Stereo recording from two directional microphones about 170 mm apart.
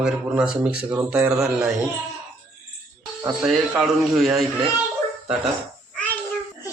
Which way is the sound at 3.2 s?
5° right (ahead or behind).